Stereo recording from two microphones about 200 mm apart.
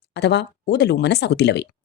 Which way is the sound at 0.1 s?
55° left (ahead or behind).